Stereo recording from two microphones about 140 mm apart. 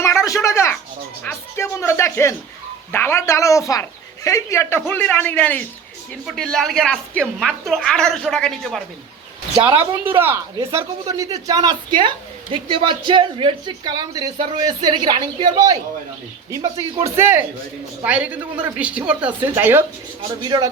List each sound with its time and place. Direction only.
0.0 s a sound: 20° left (ahead or behind)
1.2 s music: 15° left (ahead or behind)
2.9 s a woman's voice: 15° left (ahead or behind)
6.2 s a woman's voice: centre (ahead or behind)
10.2 s a woman's voice: 15° right (ahead or behind)
20.4 s speech: 30° right (ahead or behind)